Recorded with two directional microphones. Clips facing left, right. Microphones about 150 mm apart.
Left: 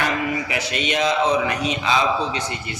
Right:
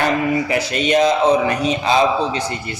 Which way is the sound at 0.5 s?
40° right (ahead or behind).